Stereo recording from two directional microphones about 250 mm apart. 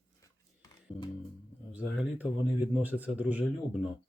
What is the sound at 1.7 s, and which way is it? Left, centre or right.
Speech, centre.